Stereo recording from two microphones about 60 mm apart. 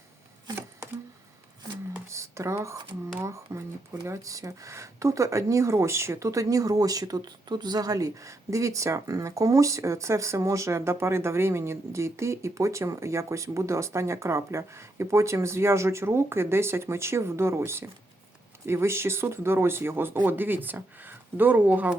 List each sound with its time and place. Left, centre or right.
2.0 s speech: right